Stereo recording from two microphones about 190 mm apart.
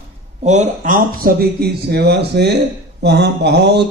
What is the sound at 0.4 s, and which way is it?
Speech, 35° right (ahead or behind).